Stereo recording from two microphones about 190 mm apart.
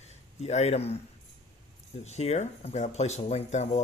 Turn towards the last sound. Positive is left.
turn(degrees=35)  # may be behind; listen again after turning